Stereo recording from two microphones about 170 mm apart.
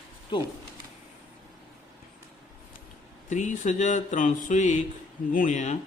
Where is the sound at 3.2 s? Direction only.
45° left (ahead or behind).